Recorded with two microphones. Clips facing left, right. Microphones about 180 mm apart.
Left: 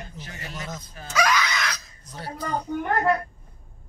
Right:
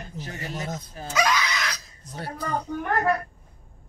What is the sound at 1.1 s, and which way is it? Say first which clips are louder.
Speech: left 1 dB; 25° right (ahead or behind).